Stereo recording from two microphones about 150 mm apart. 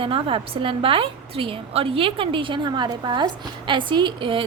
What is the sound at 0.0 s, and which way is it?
A woman's voice, 35° right (ahead or behind).